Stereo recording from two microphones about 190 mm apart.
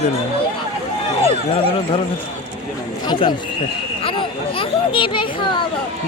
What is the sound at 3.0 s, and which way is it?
Speech, 25° left (ahead or behind).